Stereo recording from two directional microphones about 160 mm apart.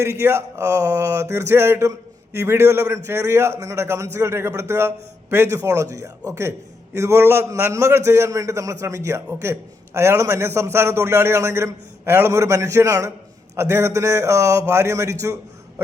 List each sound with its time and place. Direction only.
0.0 s a man's voice: 15° right (ahead or behind)